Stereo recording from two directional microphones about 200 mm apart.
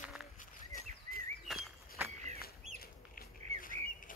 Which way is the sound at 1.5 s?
Centre (ahead or behind).